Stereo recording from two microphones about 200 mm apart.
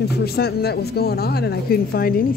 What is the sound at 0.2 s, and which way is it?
Speech, 50° left (ahead or behind).